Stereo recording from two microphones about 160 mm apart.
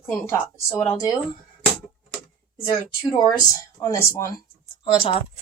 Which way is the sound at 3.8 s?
20° left (ahead or behind).